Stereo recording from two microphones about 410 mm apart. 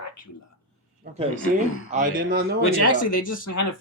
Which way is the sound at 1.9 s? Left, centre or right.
Centre.